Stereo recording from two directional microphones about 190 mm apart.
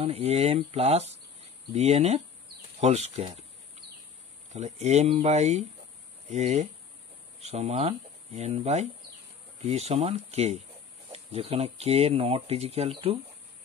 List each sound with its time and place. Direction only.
0.0 s speech: 30° right (ahead or behind)
4.5 s speech: 35° right (ahead or behind)